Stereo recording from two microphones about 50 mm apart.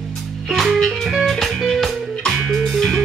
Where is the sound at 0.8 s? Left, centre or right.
Centre.